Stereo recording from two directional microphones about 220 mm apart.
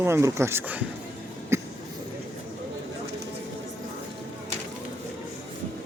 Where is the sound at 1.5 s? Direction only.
10° right (ahead or behind).